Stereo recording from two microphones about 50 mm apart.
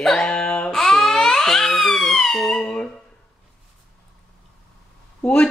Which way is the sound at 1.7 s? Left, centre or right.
Centre.